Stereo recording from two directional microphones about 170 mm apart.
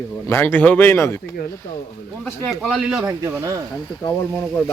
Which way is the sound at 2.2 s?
5° left (ahead or behind).